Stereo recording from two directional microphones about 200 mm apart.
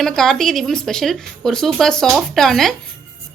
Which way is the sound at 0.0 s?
Centre (ahead or behind).